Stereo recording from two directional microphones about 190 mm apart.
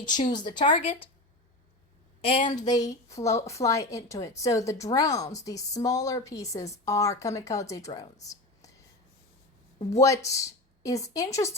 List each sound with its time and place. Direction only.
0.1 s speech: 25° left (ahead or behind)
2.2 s a woman's voice: 30° left (ahead or behind)
9.9 s a woman's voice: 15° left (ahead or behind)